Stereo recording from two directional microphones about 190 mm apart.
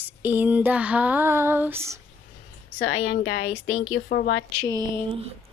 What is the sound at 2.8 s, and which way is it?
Speech, 90° left.